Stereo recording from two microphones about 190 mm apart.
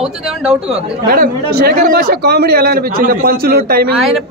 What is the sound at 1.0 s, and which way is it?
A man's voice, 55° right (ahead or behind).